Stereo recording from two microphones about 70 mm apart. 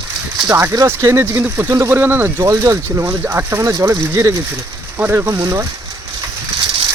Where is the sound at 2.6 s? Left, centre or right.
Right.